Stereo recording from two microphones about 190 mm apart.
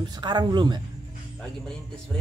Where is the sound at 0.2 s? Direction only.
20° right (ahead or behind).